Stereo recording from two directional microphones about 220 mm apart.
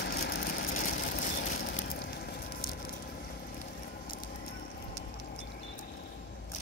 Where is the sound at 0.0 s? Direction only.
45° left (ahead or behind).